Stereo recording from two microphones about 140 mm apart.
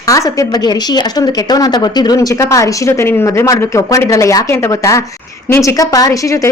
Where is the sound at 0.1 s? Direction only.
25° left (ahead or behind).